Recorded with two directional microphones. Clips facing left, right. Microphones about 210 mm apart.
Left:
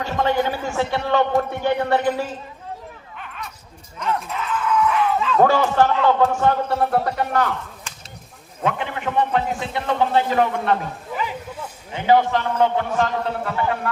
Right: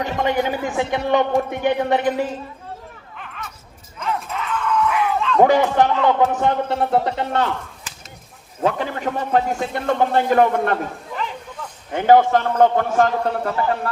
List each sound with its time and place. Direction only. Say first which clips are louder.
0.0 s a man's voice: even; 15° right (ahead or behind)
3.2 s a sound: right 1 dB; centre (ahead or behind)
5.4 s a man's voice: right 2 dB; 15° right (ahead or behind)
8.6 s a man's voice: right 3 dB; 40° right (ahead or behind)
11.1 s a sound: left 5 dB; 5° left (ahead or behind)
11.9 s a man's voice: right 4 dB; 50° right (ahead or behind)